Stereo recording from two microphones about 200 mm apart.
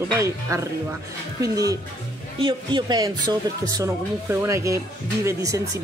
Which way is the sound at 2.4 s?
25° right (ahead or behind).